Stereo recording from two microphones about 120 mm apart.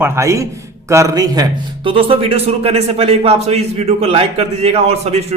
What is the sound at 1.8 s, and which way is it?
A man's voice, 45° right (ahead or behind).